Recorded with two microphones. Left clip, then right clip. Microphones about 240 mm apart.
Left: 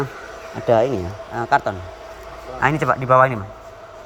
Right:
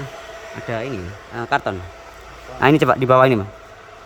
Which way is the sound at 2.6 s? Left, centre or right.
Right.